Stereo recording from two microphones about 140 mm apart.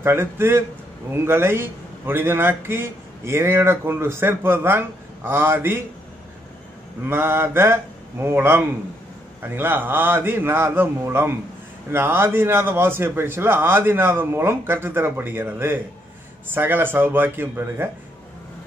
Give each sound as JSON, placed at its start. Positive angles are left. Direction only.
{"t": 0.0, "sound": "a man's voice", "side_deg": -15}
{"t": 7.1, "sound": "a man's voice", "side_deg": -15}